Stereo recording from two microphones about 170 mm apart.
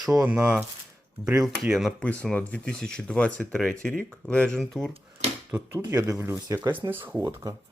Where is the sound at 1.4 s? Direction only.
Centre (ahead or behind).